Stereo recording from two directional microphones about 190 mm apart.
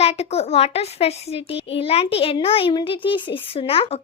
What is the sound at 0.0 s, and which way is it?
A child's voice, 35° left (ahead or behind).